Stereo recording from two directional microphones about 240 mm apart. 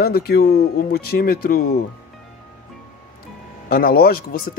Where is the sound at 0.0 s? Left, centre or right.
Left.